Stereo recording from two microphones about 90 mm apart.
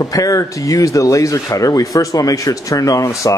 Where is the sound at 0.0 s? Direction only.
40° left (ahead or behind).